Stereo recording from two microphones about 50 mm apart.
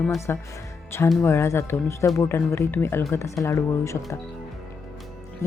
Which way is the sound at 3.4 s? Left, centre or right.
Left.